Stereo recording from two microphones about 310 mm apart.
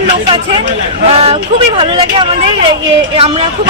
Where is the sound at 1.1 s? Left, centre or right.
Centre.